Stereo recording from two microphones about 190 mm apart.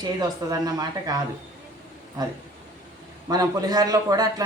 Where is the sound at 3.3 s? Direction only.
20° right (ahead or behind).